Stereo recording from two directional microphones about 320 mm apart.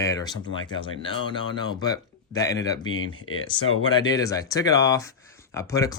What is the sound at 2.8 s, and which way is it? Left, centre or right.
Speech, left.